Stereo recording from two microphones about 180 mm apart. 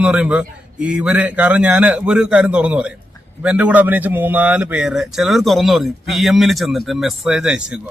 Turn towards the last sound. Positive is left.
turn(degrees=-5)  # may be behind; listen again after turning